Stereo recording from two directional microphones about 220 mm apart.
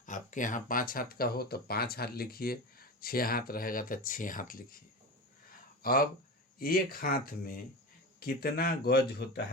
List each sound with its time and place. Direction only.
0.0 s speech: 35° left (ahead or behind)
5.5 s a sound: 40° left (ahead or behind)
6.6 s speech: 40° left (ahead or behind)